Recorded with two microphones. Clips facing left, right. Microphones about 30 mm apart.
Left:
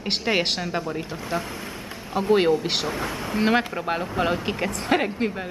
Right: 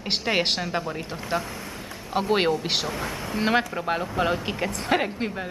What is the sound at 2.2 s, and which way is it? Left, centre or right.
Speech, right.